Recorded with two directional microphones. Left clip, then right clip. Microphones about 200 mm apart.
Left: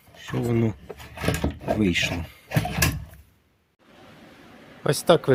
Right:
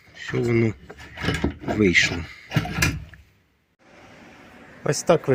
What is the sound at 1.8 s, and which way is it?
Speech, 15° left (ahead or behind).